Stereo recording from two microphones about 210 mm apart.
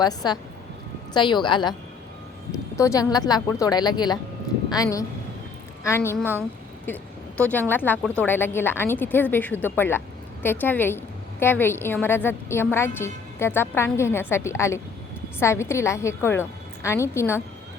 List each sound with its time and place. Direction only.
0.0 s a woman's voice: 20° left (ahead or behind)
2.7 s a woman's voice: 15° left (ahead or behind)